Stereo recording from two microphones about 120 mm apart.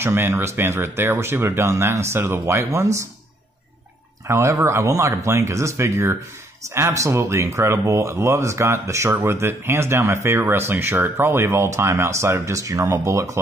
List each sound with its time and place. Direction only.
0.0 s speech: 20° right (ahead or behind)
4.3 s speech: 20° right (ahead or behind)